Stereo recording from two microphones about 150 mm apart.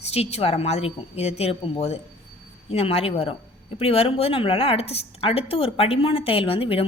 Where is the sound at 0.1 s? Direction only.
45° left (ahead or behind).